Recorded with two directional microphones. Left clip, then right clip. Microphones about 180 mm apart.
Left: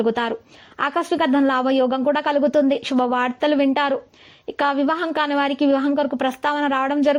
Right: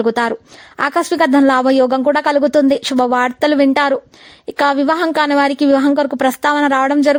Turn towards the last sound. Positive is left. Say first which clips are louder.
# right 6 dB
turn(degrees=-45)  # may be behind; listen again after turning